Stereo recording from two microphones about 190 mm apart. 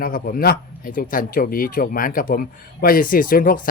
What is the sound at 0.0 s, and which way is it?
Speech, 50° left (ahead or behind).